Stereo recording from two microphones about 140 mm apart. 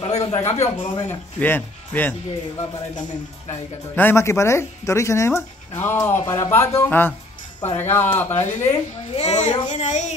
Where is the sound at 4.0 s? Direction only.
15° left (ahead or behind).